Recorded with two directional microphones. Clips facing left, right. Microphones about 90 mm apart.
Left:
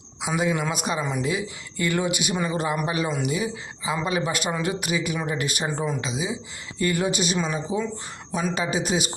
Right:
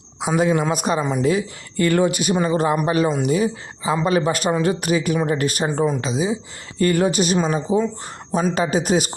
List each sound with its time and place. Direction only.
0.2 s a man's voice: 45° right (ahead or behind)
8.5 s speech: 50° right (ahead or behind)